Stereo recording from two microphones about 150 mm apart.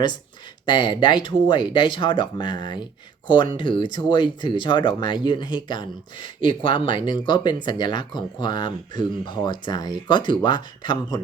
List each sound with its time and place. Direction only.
0.6 s speech: 30° left (ahead or behind)